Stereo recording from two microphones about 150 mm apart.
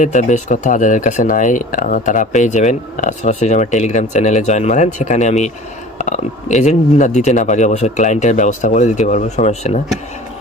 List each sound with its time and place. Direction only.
0.0 s speech: 55° left (ahead or behind)